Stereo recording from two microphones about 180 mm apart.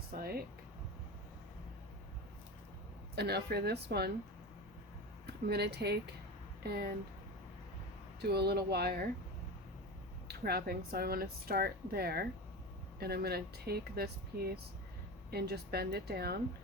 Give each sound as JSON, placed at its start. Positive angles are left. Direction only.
{"t": 0.1, "sound": "a woman's voice", "side_deg": -55}
{"t": 3.2, "sound": "a woman's voice", "side_deg": -65}
{"t": 5.2, "sound": "speech", "side_deg": -65}
{"t": 8.2, "sound": "a woman's voice", "side_deg": -65}
{"t": 10.2, "sound": "a woman's voice", "side_deg": -60}